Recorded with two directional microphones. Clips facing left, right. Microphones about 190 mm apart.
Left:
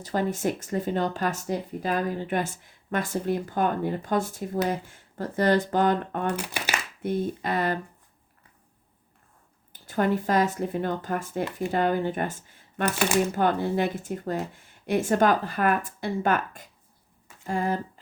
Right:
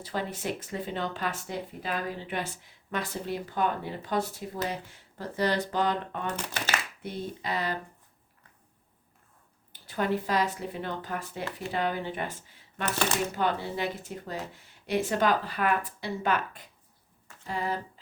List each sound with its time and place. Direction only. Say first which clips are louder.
0.0 s speech: left 7 dB; 45° left (ahead or behind)
6.3 s speech: left 2 dB; 10° left (ahead or behind)
7.0 s speech: left 8 dB; 50° left (ahead or behind)
9.8 s speech: left 4 dB; 45° left (ahead or behind)